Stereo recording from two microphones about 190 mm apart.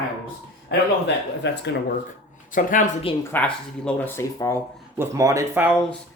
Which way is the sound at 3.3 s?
5° left (ahead or behind).